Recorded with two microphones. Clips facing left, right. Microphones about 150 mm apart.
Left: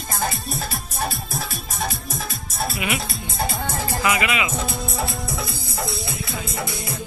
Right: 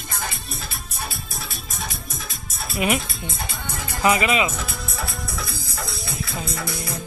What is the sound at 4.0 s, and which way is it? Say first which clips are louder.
Speech: right 4 dB; 35° right (ahead or behind).